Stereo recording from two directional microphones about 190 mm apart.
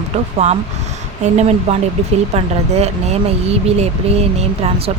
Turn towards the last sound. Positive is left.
turn(degrees=-30)  # may be behind; listen again after turning